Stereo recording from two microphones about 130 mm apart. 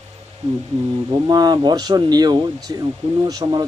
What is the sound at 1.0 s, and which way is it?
A man's voice, 30° right (ahead or behind).